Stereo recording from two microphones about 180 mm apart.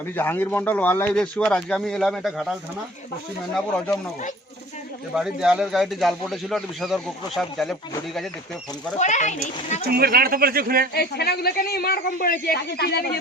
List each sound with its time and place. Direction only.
0.2 s speech: 10° left (ahead or behind)
5.1 s speech: 5° right (ahead or behind)
9.0 s speech: 40° left (ahead or behind)
9.8 s speech: 55° right (ahead or behind)
10.9 s speech: 65° left (ahead or behind)